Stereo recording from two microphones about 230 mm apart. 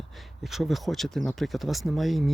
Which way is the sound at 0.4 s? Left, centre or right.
Centre.